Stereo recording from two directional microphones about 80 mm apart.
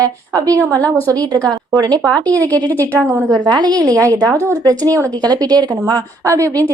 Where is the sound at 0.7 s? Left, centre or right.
Centre.